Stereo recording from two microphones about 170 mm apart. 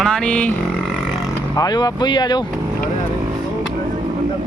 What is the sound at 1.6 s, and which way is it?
Speech, 25° left (ahead or behind).